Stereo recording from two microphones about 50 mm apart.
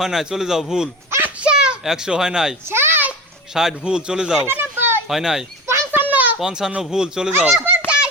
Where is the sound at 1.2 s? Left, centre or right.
Right.